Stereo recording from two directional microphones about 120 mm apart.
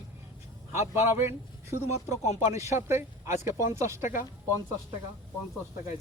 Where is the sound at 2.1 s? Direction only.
70° left (ahead or behind).